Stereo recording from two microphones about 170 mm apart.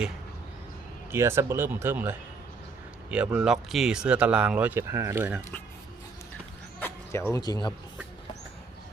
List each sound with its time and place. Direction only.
1.1 s speech: 15° right (ahead or behind)
6.7 s speech: 15° left (ahead or behind)